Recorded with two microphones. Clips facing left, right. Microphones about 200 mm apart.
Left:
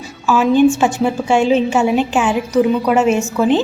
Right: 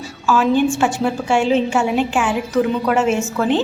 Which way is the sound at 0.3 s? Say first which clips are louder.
Left 4 dB; 15° left (ahead or behind).